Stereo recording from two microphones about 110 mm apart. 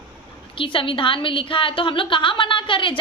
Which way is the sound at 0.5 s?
50° left (ahead or behind).